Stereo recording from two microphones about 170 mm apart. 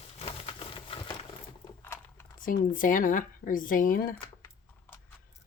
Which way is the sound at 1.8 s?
15° left (ahead or behind).